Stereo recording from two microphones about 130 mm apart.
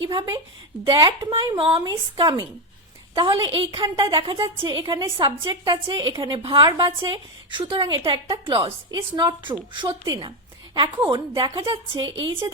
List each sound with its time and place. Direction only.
0.2 s a woman's voice: 30° right (ahead or behind)
1.5 s speech: 40° right (ahead or behind)
1.8 s a woman's voice: 30° right (ahead or behind)
11.4 s a woman's voice: 25° right (ahead or behind)